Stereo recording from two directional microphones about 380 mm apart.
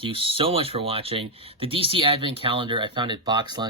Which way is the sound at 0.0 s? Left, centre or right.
Centre.